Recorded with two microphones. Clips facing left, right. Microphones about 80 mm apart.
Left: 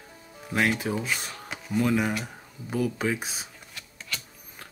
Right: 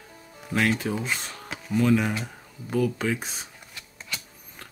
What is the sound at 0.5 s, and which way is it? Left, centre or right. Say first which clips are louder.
Speech: right 1 dB; centre.